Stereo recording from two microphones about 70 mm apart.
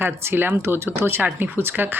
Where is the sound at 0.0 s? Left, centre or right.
Right.